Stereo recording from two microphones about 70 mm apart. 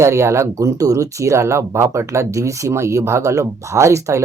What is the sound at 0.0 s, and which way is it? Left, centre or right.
Speech, right.